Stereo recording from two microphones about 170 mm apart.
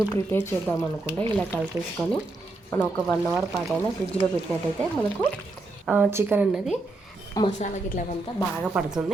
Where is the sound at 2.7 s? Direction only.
15° left (ahead or behind).